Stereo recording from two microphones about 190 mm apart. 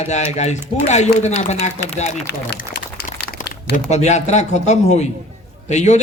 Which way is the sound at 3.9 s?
35° left (ahead or behind).